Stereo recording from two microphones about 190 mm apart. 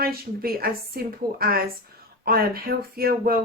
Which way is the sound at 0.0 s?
50° right (ahead or behind).